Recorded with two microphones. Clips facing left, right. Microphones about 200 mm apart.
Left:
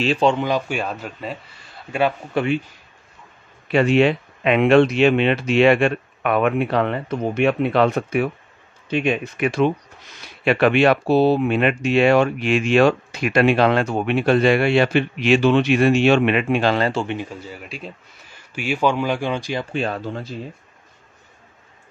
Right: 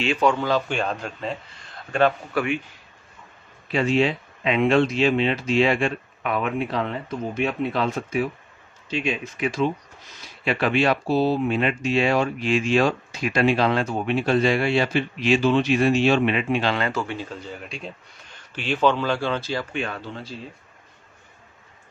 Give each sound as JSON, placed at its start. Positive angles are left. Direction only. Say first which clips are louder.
{"t": 0.0, "sound": "speech", "louder": "left 3 dB", "side_deg": 30}
{"t": 2.3, "sound": "speech", "louder": "left 4 dB", "side_deg": 30}
{"t": 3.6, "sound": "speech", "louder": "left 5 dB", "side_deg": 65}
{"t": 16.6, "sound": "speech", "louder": "left 5 dB", "side_deg": 35}
{"t": 17.0, "sound": "speech", "louder": "left 4 dB", "side_deg": 20}
{"t": 19.7, "sound": "speech", "louder": "left 5 dB", "side_deg": 35}